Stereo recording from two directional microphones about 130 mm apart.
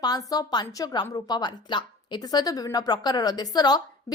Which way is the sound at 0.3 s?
30° left (ahead or behind).